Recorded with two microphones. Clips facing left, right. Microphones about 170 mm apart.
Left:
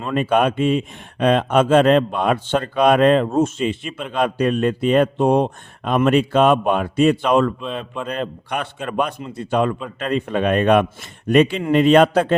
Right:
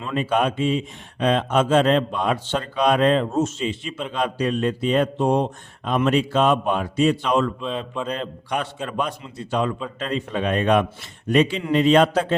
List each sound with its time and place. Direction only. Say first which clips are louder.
0.0 s speech: left 4 dB; 55° left (ahead or behind)